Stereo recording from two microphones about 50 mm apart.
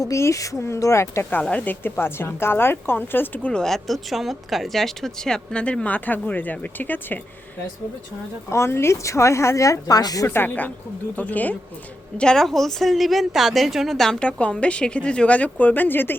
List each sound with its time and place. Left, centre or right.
0.1 s speech: left
1.3 s speech: left
1.8 s a woman's voice: left
3.5 s speech: centre
3.8 s speech: centre
5.6 s speech: left
8.4 s a woman's voice: left
10.2 s a woman's voice: left
11.2 s speech: left
12.1 s speech: centre
13.9 s speech: centre
14.2 s speech: left